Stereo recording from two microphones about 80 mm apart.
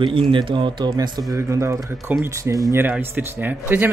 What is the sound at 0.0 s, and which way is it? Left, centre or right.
Speech, right.